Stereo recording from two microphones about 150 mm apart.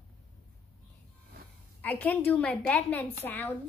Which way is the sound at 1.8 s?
10° left (ahead or behind).